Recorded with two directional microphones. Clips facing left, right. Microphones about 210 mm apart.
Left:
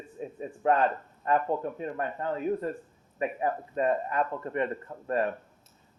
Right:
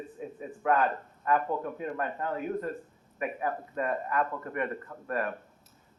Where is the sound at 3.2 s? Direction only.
25° left (ahead or behind).